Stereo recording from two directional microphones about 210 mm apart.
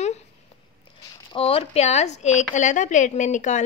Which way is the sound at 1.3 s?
25° left (ahead or behind).